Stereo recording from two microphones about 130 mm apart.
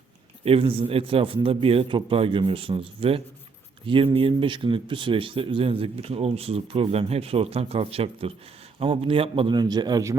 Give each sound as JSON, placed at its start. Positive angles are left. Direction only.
{"t": 0.4, "sound": "a man's voice", "side_deg": -45}